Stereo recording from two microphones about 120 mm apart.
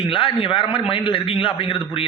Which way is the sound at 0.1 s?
50° left (ahead or behind).